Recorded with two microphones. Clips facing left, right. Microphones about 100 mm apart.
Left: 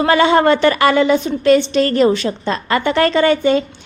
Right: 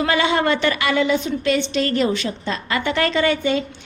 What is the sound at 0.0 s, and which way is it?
A woman's voice, 45° left (ahead or behind).